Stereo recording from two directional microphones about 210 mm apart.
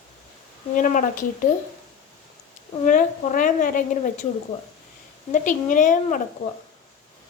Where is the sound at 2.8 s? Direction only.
40° left (ahead or behind).